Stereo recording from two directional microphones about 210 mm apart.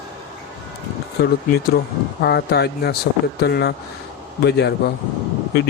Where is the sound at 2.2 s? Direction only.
55° left (ahead or behind).